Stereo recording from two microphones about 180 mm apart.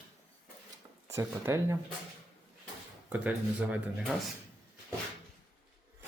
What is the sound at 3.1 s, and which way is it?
Speech, 10° right (ahead or behind).